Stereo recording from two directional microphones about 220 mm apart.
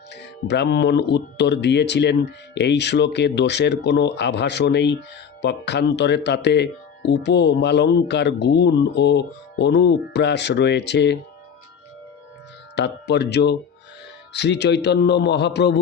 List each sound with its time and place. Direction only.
0.1 s speech: 50° left (ahead or behind)
12.7 s speech: 50° left (ahead or behind)